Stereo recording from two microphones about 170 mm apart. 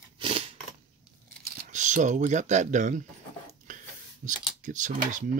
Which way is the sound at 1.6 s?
45° right (ahead or behind).